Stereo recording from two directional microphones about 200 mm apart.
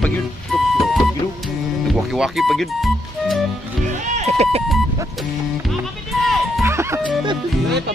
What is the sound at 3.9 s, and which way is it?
Speech, 35° right (ahead or behind).